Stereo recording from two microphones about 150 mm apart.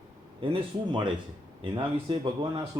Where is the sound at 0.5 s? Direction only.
30° right (ahead or behind).